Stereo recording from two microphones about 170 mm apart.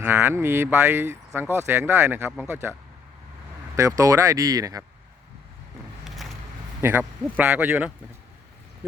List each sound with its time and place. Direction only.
0.0 s speech: 15° right (ahead or behind)
3.8 s speech: 20° right (ahead or behind)
6.8 s speech: 10° right (ahead or behind)